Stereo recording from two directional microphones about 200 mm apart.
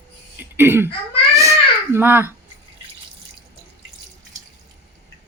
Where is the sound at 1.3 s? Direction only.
15° right (ahead or behind).